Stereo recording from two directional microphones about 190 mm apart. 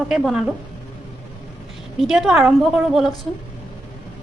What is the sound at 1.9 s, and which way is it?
A woman's voice, centre (ahead or behind).